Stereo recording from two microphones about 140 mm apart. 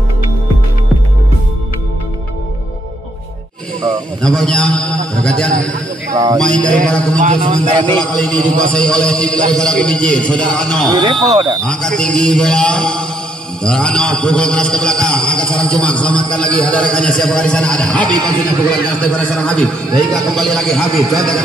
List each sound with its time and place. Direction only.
4.2 s a man's voice: 5° left (ahead or behind)
6.1 s speech: 25° right (ahead or behind)
6.4 s a man's voice: 5° left (ahead or behind)
7.2 s a man's voice: 65° right (ahead or behind)
7.9 s a man's voice: 5° left (ahead or behind)
11.2 s speech: 30° right (ahead or behind)
11.6 s a man's voice: 5° left (ahead or behind)